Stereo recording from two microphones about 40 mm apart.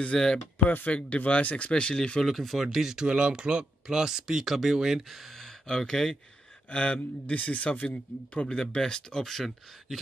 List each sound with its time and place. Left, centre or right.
0.1 s speech: centre
0.8 s a man's voice: left
1.7 s speech: left
2.2 s speech: centre
3.1 s speech: right; by 6.1 s centre
6.7 s a man's voice: left
8.3 s speech: left; by 9.9 s centre